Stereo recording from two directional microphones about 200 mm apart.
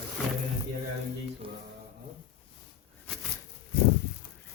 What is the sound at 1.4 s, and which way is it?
Mantra, 25° right (ahead or behind).